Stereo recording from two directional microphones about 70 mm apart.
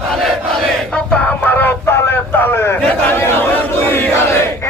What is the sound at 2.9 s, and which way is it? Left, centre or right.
Speech, left.